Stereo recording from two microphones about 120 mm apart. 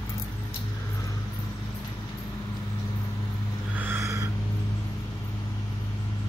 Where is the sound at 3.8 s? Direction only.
20° right (ahead or behind).